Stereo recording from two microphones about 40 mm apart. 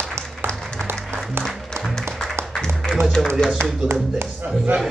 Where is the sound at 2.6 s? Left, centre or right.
Centre.